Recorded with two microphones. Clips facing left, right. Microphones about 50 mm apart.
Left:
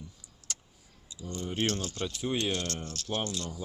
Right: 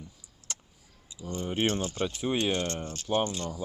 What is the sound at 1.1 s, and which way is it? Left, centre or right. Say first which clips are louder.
Speech: right 3 dB; right.